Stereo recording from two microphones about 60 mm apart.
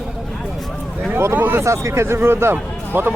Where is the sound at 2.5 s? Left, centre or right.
Right.